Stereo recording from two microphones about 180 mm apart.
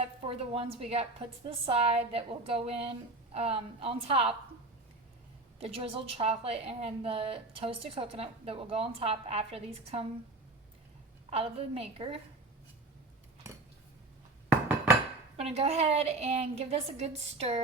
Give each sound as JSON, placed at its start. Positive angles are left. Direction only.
{"t": 0.0, "sound": "a woman's voice", "side_deg": -30}
{"t": 5.5, "sound": "a woman's voice", "side_deg": -35}
{"t": 11.3, "sound": "a woman's voice", "side_deg": -35}
{"t": 15.4, "sound": "a woman's voice", "side_deg": -35}